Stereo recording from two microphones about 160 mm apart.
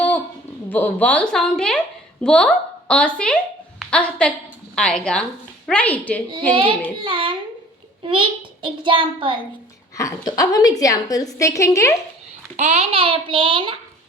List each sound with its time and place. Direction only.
0.7 s a woman's voice: 10° left (ahead or behind)
6.5 s a child's voice: 30° right (ahead or behind)
10.0 s a woman's voice: 20° left (ahead or behind)
12.5 s a child's voice: 45° right (ahead or behind)